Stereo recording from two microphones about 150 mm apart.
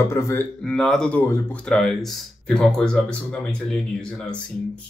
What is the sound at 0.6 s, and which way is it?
Speech, centre (ahead or behind).